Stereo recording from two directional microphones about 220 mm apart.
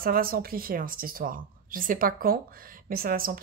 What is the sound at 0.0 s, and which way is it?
Speech, 40° right (ahead or behind).